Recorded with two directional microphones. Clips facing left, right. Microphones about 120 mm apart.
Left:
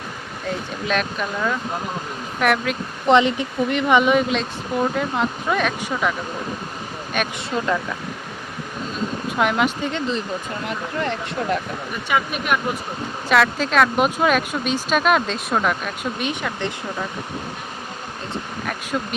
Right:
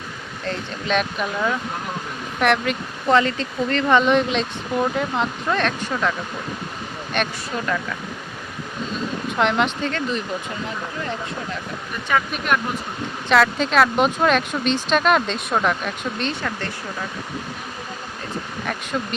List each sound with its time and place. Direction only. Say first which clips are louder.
0.4 s speech: left 1 dB; 5° left (ahead or behind)
3.1 s speech: left 2 dB; 20° left (ahead or behind)
7.1 s speech: right 1 dB; 5° left (ahead or behind)
7.5 s speech: left 3 dB; 25° left (ahead or behind)
9.4 s speech: even; 5° left (ahead or behind)
12.0 s speech: even; 10° left (ahead or behind)
16.2 s speech: left 1 dB; 15° left (ahead or behind)
18.6 s speech: even; 5° left (ahead or behind)